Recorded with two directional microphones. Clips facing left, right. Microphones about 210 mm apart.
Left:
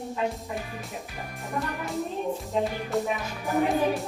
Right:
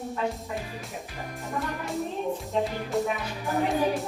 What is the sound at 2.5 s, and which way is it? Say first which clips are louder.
Music: even; centre (ahead or behind).